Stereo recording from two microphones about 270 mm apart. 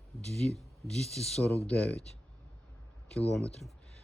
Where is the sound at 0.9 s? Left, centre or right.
Centre.